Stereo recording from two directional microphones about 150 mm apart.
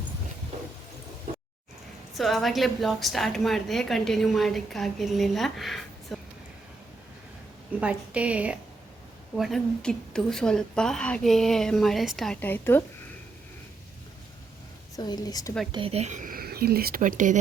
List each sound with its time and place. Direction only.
2.1 s a woman's voice: centre (ahead or behind)
7.8 s a woman's voice: 10° right (ahead or behind)
9.3 s a woman's voice: centre (ahead or behind)
12.4 s a woman's voice: 15° left (ahead or behind)
14.9 s a woman's voice: 25° left (ahead or behind)
15.7 s speech: 40° right (ahead or behind); by 17.4 s 60° right (ahead or behind)